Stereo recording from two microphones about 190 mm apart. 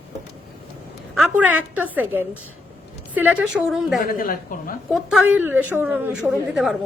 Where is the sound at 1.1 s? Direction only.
5° right (ahead or behind).